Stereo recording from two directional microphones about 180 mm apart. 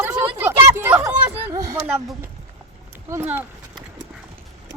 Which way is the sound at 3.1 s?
15° right (ahead or behind).